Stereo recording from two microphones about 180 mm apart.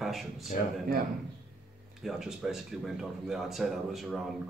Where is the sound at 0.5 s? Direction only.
45° left (ahead or behind).